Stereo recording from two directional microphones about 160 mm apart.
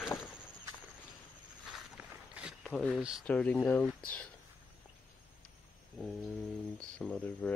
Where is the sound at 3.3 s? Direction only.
10° left (ahead or behind).